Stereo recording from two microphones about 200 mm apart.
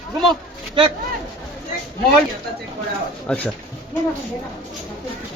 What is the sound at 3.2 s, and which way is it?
Speech, 5° left (ahead or behind).